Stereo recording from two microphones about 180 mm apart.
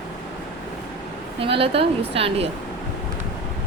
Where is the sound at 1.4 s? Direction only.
30° right (ahead or behind).